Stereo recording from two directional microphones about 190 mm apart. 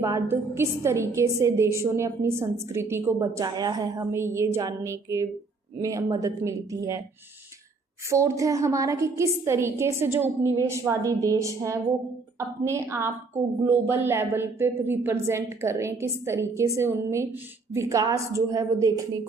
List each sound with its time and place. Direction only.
0.0 s a woman's voice: 15° right (ahead or behind)
8.1 s a woman's voice: 15° right (ahead or behind)